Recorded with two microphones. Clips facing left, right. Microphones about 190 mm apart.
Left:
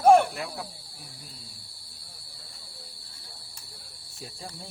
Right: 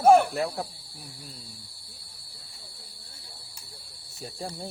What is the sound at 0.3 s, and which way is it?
Cricket, 40° right (ahead or behind).